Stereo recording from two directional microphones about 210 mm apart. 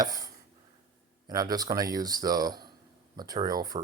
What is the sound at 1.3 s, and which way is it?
Speech, 20° right (ahead or behind).